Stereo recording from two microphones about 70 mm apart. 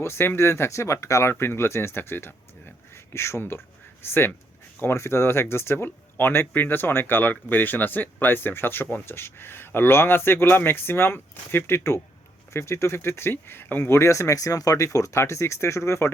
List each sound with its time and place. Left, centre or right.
0.0 s speech: left
1.3 s speech: left
13.9 s speech: left